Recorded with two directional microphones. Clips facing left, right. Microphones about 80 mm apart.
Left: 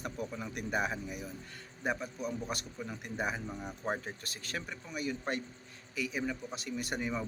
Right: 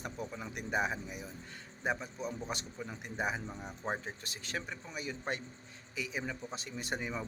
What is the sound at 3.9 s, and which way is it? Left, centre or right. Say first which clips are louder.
Speech: left 1 dB; right.